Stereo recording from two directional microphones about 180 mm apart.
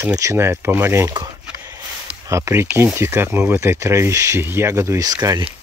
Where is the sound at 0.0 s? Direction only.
15° right (ahead or behind).